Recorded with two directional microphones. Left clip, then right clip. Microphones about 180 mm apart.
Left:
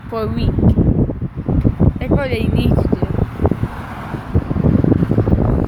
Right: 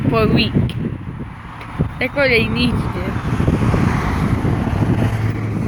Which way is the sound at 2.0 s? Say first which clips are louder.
Right 7 dB; 5° right (ahead or behind).